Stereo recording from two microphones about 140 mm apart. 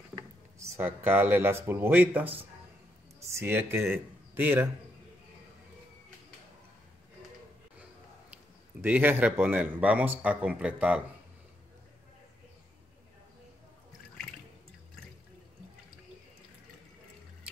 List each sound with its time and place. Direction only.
0.1 s speech: 15° right (ahead or behind)
8.8 s speech: 10° right (ahead or behind)